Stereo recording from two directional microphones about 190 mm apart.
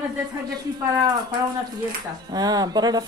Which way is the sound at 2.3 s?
20° right (ahead or behind).